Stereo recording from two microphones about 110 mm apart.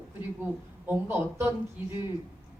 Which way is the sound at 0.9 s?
20° right (ahead or behind).